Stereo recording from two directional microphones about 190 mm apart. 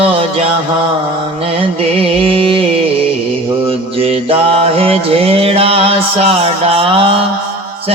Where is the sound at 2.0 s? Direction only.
30° right (ahead or behind).